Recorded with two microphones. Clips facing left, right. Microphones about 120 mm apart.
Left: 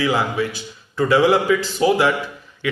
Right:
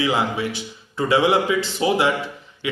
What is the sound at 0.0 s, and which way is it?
A man's voice, 20° right (ahead or behind).